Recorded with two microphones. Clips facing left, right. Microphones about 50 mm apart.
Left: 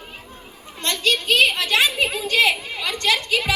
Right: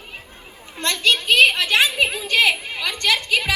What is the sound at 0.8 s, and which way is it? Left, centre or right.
A woman's voice, right.